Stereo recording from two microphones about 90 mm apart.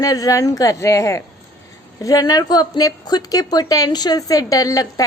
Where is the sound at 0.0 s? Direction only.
40° left (ahead or behind).